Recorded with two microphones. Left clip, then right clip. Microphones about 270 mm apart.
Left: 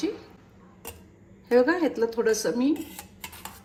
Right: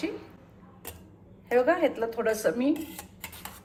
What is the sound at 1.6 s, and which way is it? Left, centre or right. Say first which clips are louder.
A woman's voice: left 1 dB; centre.